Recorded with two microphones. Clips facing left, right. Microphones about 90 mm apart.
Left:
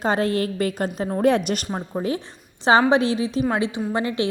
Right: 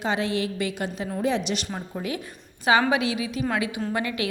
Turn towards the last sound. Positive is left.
turn(degrees=25)  # may be behind; listen again after turning